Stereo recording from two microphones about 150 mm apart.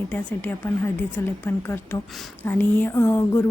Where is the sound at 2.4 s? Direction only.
15° left (ahead or behind).